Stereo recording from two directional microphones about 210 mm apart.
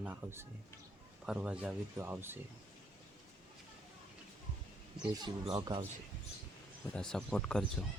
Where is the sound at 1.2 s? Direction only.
5° right (ahead or behind).